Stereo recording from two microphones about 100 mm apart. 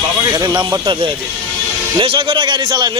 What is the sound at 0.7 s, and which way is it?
Speech, 35° right (ahead or behind).